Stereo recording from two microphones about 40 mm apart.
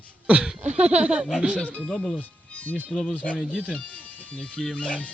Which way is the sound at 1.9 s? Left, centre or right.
Centre.